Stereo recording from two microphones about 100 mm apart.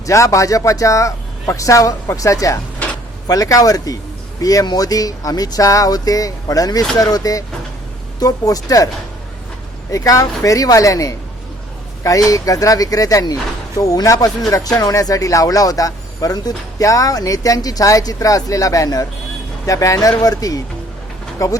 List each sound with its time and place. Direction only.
0.0 s speech: 30° left (ahead or behind)
9.9 s speech: 35° left (ahead or behind)